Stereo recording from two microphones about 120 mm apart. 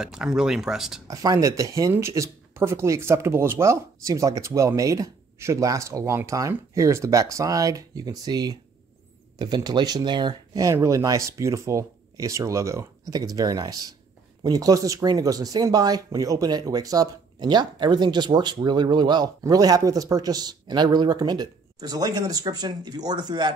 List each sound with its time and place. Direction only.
0.0 s speech: 5° right (ahead or behind)
1.0 s speech: 30° right (ahead or behind)